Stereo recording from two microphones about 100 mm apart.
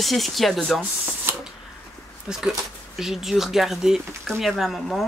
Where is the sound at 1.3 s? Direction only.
20° right (ahead or behind).